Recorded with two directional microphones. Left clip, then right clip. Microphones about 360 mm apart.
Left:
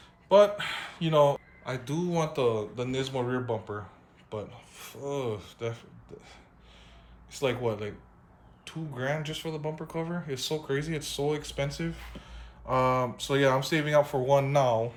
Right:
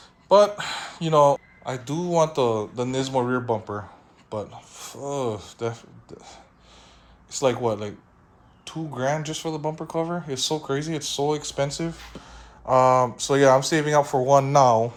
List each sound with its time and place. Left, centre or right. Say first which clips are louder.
0.3 s speech: right 4 dB; centre
4.3 s rub: right 6 dB; centre
4.9 s speech: right 5 dB; centre
14.6 s speech: right 8 dB; right